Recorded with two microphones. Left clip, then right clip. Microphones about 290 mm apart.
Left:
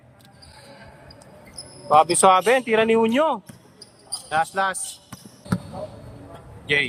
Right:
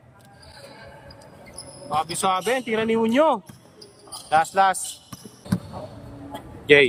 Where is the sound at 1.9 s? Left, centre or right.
Centre.